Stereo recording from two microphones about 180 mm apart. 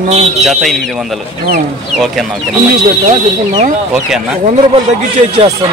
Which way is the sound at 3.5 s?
40° right (ahead or behind).